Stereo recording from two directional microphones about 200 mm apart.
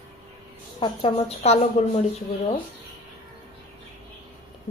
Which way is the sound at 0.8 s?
30° left (ahead or behind).